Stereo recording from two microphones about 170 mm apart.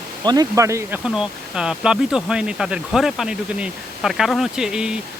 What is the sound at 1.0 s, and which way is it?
Speech, 5° right (ahead or behind).